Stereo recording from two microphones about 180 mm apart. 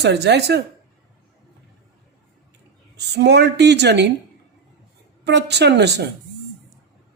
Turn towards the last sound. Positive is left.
turn(degrees=-70)  # may be behind; listen again after turning